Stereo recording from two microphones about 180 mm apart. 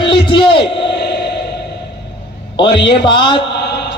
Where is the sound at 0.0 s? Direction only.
25° left (ahead or behind).